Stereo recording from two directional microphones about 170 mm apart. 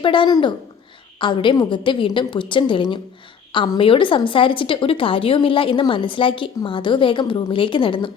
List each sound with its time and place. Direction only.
0.0 s a woman's voice: 30° left (ahead or behind)